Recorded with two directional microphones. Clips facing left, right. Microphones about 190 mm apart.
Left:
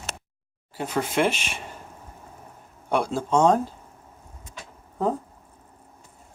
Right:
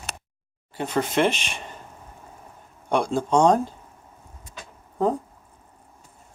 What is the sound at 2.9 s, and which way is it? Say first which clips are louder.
Speech: right 2 dB; 5° left (ahead or behind).